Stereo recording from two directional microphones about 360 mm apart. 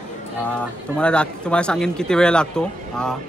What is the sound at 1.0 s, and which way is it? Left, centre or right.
Speech, centre.